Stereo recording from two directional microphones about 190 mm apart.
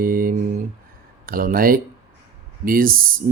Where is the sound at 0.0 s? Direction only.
50° right (ahead or behind).